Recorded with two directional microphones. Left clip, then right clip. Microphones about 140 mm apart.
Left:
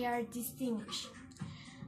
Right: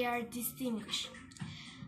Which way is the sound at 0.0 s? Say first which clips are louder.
Right 1 dB; 30° left (ahead or behind).